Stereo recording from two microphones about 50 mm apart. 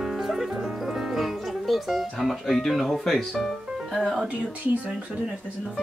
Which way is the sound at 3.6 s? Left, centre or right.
Centre.